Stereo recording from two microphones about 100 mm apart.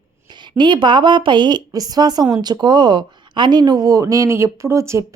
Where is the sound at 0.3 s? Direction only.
50° right (ahead or behind).